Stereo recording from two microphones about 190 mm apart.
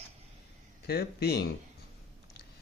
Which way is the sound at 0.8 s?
55° left (ahead or behind).